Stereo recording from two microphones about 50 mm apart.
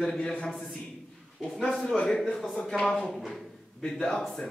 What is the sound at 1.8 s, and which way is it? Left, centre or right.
Speech, centre.